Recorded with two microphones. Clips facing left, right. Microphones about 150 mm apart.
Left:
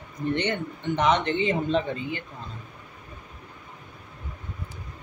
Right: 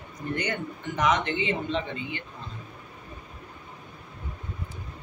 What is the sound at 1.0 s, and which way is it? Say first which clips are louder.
Speech: left 2 dB; 30° left (ahead or behind).